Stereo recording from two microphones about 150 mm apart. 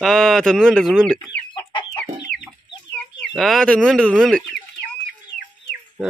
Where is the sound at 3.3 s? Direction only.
Centre (ahead or behind).